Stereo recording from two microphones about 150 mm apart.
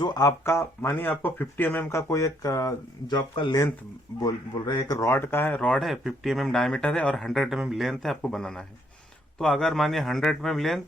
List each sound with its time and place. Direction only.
0.0 s speech: 25° left (ahead or behind); by 10.8 s centre (ahead or behind)